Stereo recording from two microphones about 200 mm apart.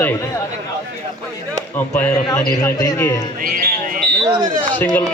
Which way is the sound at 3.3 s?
45° right (ahead or behind).